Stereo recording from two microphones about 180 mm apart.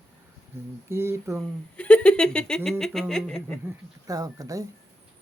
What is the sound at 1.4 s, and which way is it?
Speech, 5° left (ahead or behind).